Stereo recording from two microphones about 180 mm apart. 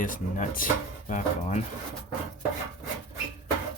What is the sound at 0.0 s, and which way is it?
Speech, 45° left (ahead or behind).